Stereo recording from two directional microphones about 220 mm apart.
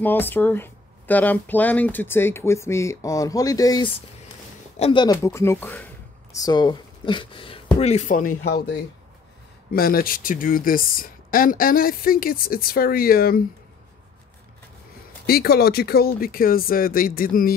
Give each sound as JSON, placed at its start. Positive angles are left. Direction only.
{"t": 0.0, "sound": "speech", "side_deg": 10}
{"t": 9.7, "sound": "speech", "side_deg": 40}
{"t": 15.2, "sound": "speech", "side_deg": 45}